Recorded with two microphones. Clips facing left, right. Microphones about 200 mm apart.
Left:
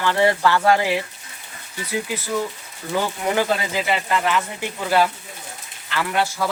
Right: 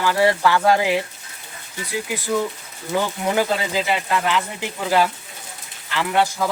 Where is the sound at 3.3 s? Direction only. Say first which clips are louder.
Right 1 dB; 15° right (ahead or behind).